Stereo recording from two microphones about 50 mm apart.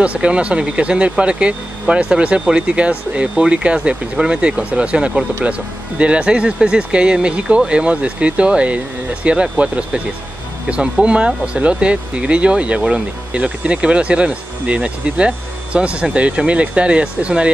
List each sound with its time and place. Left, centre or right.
0.0 s speech: right